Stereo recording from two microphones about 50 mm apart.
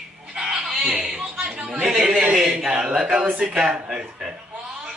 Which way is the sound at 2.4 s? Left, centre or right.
Centre.